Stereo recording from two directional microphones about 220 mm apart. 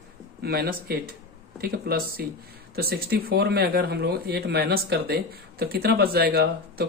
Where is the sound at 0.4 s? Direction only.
45° right (ahead or behind).